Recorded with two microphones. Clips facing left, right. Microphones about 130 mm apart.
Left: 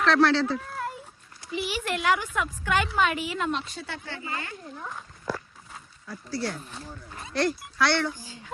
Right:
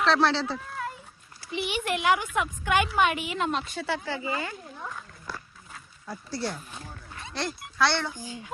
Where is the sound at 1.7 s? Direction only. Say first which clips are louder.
Right 1 dB; 20° right (ahead or behind).